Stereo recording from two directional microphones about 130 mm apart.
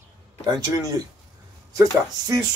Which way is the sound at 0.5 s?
30° right (ahead or behind).